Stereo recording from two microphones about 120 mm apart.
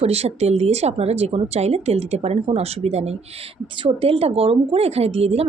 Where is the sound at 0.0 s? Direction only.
60° right (ahead or behind).